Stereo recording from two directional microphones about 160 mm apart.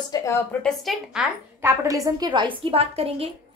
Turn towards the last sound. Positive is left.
turn(degrees=-40)  # may be behind; listen again after turning